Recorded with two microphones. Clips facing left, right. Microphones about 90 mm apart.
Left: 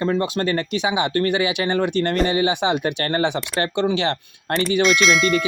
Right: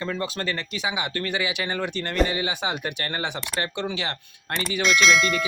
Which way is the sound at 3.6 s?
60° left (ahead or behind).